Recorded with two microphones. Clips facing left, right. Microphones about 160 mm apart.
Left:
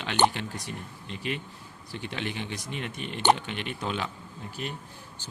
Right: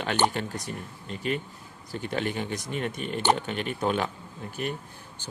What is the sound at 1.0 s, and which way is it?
Speech, 45° right (ahead or behind).